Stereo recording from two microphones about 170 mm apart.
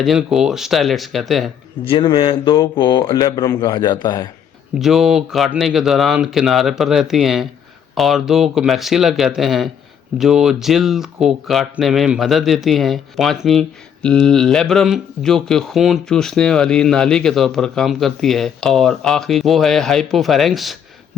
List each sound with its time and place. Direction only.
0.0 s speech: centre (ahead or behind)
1.8 s speech: 30° left (ahead or behind)
4.8 s speech: centre (ahead or behind)